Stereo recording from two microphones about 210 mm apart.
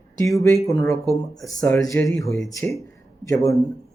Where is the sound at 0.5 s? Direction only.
15° left (ahead or behind).